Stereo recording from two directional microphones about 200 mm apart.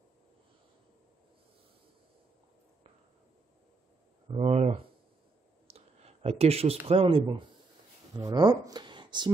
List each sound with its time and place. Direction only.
4.3 s a sound: 30° right (ahead or behind)
5.7 s clicking: 30° right (ahead or behind)
6.9 s speech: 30° right (ahead or behind)